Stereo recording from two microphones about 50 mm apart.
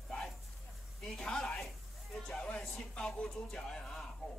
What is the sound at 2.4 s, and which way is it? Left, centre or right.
Music, left.